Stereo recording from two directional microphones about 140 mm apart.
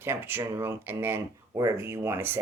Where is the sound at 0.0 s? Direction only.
15° right (ahead or behind).